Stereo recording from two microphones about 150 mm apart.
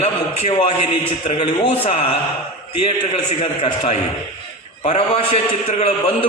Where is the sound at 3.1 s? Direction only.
45° left (ahead or behind).